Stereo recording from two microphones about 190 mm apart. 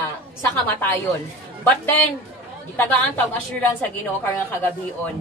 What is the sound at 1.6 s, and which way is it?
A woman's voice, 10° left (ahead or behind).